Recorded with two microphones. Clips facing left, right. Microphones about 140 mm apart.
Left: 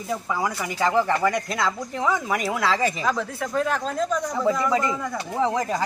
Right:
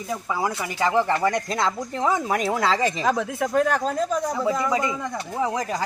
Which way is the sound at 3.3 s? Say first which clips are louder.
Right 3 dB; 50° right (ahead or behind).